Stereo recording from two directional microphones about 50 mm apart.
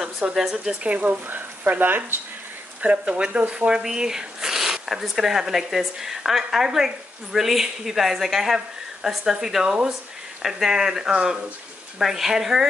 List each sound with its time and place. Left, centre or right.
0.3 s speech: centre
0.8 s speech: right
2.8 s speech: right; by 12.6 s centre